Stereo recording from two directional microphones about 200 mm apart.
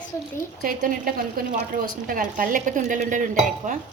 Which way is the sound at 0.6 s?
45° right (ahead or behind).